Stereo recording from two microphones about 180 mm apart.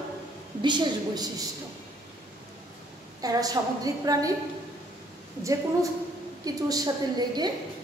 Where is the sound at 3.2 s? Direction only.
20° right (ahead or behind).